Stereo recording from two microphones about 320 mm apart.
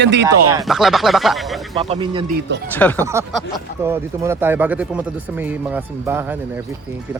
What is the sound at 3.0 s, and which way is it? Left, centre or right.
Speech, centre.